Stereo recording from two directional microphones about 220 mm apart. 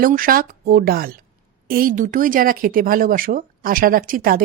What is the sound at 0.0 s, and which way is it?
Speech, 40° right (ahead or behind).